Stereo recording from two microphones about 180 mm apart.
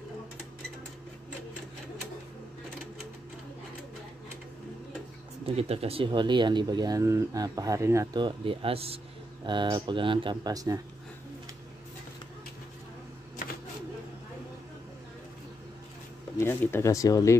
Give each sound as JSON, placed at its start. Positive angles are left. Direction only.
{"t": 5.4, "sound": "speech", "side_deg": -35}
{"t": 16.3, "sound": "speech", "side_deg": 15}